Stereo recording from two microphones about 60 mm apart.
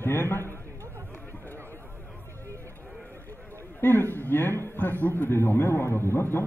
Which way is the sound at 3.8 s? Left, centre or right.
Left.